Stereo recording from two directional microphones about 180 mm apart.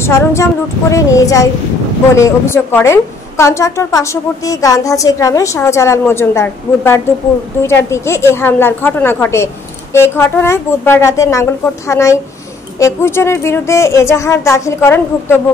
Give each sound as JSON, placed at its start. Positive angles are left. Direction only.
{"t": 0.0, "sound": "a woman's voice", "side_deg": 15}